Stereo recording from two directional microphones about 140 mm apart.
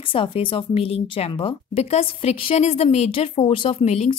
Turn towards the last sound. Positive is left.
turn(degrees=50)  # may be behind; listen again after turning